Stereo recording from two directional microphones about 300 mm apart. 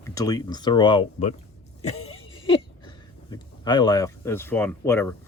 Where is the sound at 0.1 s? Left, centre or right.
Centre.